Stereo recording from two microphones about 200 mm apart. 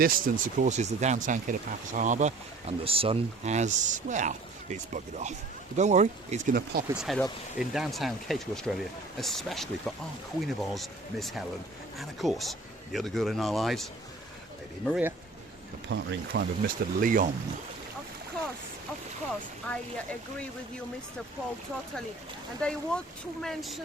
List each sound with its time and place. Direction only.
0.0 s speech: 45° right (ahead or behind)
6.5 s speech: 50° right (ahead or behind)
6.9 s speech: centre (ahead or behind)
14.8 s speech: 5° right (ahead or behind)
15.9 s speech: 55° right (ahead or behind)
19.7 s speech: 10° left (ahead or behind)
22.6 s speech: 5° left (ahead or behind)